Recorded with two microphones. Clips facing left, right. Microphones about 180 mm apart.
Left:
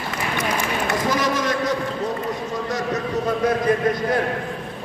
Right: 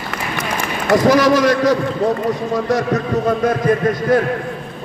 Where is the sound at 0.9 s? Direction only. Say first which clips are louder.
Right 12 dB; 75° right (ahead or behind).